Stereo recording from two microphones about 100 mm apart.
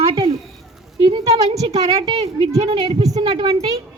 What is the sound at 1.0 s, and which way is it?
Speech, 60° right (ahead or behind).